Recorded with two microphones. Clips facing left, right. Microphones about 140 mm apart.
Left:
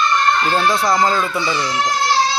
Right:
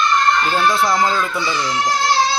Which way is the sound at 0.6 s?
Centre (ahead or behind).